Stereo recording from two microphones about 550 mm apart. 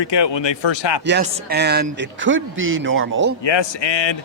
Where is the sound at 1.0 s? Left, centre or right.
Centre.